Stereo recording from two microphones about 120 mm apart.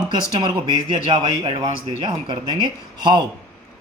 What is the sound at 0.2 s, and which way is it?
Speech, 40° right (ahead or behind).